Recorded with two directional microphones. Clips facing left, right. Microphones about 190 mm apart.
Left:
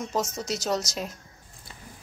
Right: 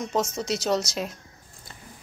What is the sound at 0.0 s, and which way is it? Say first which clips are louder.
Speech: right 3 dB; centre (ahead or behind).